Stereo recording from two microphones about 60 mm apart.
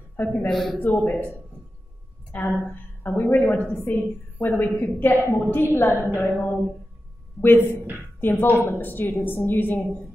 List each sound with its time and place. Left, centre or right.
0.1 s speech: left
0.5 s speech: centre
0.8 s a woman's voice: left
2.6 s a woman's voice: left